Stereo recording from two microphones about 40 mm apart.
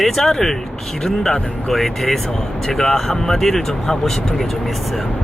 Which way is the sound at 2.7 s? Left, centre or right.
Centre.